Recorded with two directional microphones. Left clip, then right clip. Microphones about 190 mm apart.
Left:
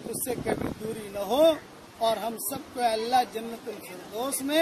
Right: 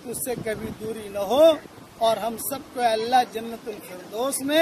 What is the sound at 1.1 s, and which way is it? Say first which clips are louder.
Speech: right 5 dB; 5° right (ahead or behind).